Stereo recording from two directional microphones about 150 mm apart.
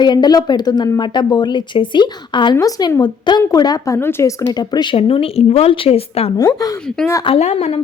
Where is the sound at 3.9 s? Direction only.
15° left (ahead or behind); by 6.3 s 40° left (ahead or behind).